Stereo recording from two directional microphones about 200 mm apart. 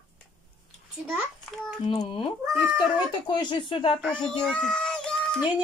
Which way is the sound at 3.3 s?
25° left (ahead or behind).